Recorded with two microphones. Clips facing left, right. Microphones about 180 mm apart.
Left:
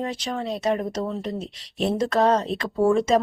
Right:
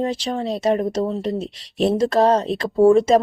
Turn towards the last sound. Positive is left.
turn(degrees=-35)  # may be behind; listen again after turning